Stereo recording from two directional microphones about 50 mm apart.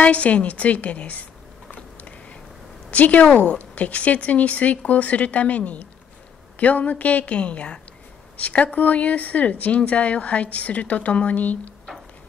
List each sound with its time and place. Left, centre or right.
0.0 s speech: left
2.9 s a woman's voice: left